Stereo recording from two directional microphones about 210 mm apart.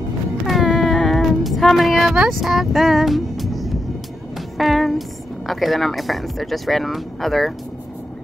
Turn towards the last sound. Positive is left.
turn(degrees=0)  # may be behind; listen again after turning